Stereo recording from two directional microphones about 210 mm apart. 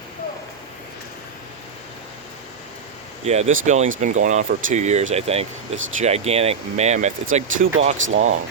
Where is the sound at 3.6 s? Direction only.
35° right (ahead or behind).